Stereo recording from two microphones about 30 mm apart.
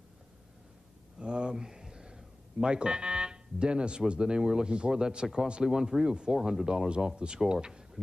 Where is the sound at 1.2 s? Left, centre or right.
Right.